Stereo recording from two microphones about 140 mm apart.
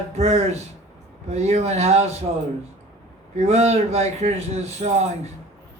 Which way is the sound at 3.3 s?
50° right (ahead or behind).